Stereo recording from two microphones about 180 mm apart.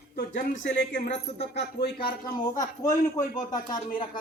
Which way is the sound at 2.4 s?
20° left (ahead or behind).